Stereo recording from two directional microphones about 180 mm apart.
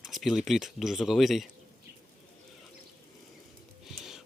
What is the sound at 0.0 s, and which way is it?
Speech, centre (ahead or behind).